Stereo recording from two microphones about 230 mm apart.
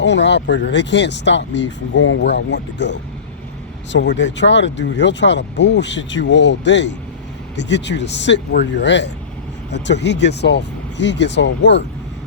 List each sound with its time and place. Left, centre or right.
0.0 s speech: left